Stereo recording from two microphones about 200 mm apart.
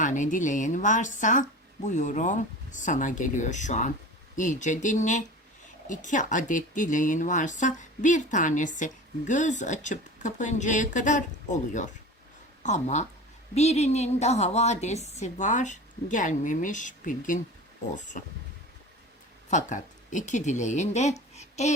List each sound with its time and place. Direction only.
0.0 s a woman's voice: 40° left (ahead or behind)
19.5 s speech: 40° left (ahead or behind)